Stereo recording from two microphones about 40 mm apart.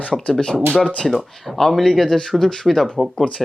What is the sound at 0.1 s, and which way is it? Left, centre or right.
Speech, centre.